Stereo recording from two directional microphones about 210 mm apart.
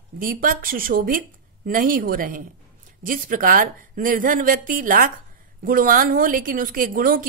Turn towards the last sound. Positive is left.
turn(degrees=-40)  # may be behind; listen again after turning